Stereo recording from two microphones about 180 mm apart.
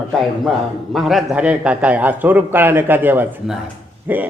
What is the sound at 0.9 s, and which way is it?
A man's voice, centre (ahead or behind).